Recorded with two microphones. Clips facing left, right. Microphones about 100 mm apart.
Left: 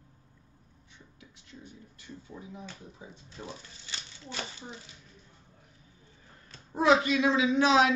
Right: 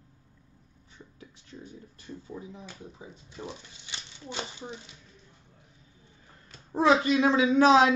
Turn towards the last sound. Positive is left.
turn(degrees=-45)  # may be behind; listen again after turning